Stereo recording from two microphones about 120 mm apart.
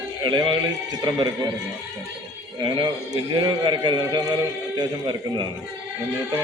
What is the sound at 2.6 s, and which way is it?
A man's voice, 40° right (ahead or behind).